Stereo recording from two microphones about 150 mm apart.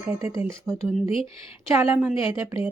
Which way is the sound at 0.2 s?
20° right (ahead or behind).